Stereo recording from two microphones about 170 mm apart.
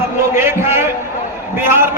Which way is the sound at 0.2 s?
15° right (ahead or behind).